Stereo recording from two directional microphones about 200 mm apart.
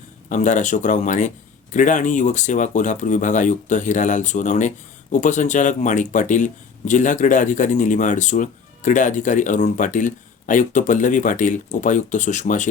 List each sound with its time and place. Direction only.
0.3 s speech: 40° left (ahead or behind)